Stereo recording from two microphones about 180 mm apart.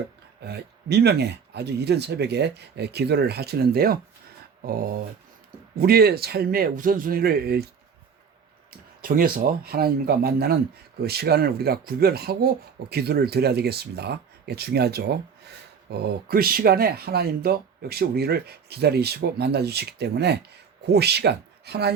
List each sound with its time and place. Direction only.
0.4 s speech: 65° right (ahead or behind)
4.6 s a sound: 55° right (ahead or behind)
5.7 s speech: 60° right (ahead or behind)
9.0 s speech: 55° right (ahead or behind)